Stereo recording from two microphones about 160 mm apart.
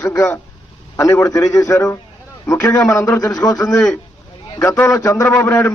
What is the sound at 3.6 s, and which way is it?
Speech, 5° left (ahead or behind).